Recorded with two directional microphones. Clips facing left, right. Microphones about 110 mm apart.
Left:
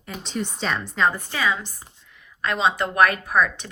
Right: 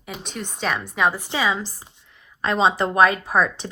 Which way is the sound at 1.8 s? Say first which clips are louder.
Even; 20° right (ahead or behind).